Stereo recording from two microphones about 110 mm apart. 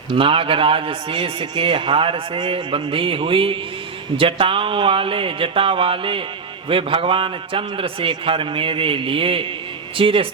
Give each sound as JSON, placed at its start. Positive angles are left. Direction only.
{"t": 0.1, "sound": "a man's voice", "side_deg": -55}